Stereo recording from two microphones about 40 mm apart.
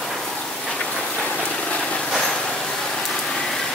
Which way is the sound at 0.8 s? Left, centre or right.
Left.